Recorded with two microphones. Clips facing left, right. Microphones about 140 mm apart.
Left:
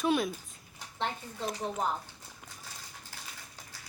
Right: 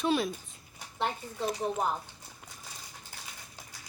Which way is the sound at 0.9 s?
10° right (ahead or behind).